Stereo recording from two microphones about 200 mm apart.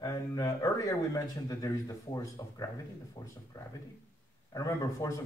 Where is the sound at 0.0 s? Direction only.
20° left (ahead or behind).